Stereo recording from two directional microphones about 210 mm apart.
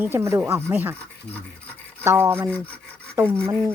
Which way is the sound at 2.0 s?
10° right (ahead or behind).